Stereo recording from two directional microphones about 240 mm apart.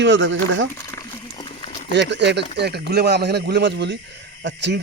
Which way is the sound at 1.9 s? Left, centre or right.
Right.